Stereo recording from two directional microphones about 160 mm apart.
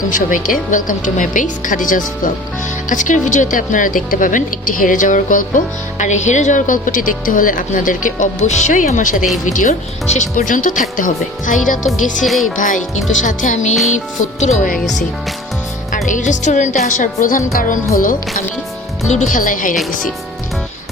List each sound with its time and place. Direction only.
0.1 s speech: 55° left (ahead or behind)
12.2 s music: centre (ahead or behind)
12.5 s speech: 55° left (ahead or behind)
16.0 s speech: 50° left (ahead or behind)
19.0 s speech: 50° left (ahead or behind)